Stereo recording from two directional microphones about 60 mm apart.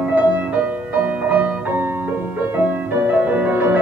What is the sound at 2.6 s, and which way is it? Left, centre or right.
Music, right.